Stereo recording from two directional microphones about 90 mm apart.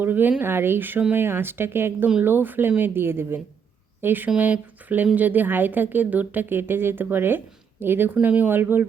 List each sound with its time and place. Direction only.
0.0 s a woman's voice: 20° right (ahead or behind)